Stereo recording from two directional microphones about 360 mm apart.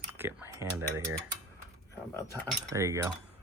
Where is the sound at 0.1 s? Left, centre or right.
Centre.